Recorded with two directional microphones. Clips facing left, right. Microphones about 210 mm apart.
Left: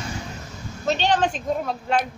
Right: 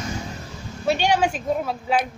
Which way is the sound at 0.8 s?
10° right (ahead or behind).